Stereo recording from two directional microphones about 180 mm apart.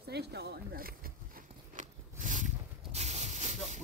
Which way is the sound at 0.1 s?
65° right (ahead or behind).